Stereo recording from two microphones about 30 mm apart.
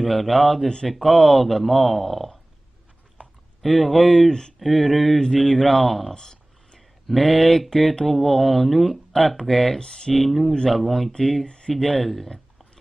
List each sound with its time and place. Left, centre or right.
0.0 s speech: centre
3.6 s speech: centre
4.3 s speech: left
4.6 s speech: centre
6.1 s a sound: left
7.1 s speech: centre
9.8 s speech: left
10.1 s speech: centre
11.4 s speech: left
11.8 s speech: centre